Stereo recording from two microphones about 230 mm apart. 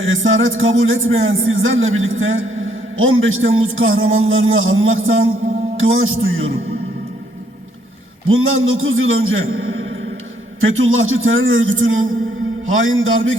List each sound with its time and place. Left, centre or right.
0.0 s a man's voice: right
8.3 s a man's voice: right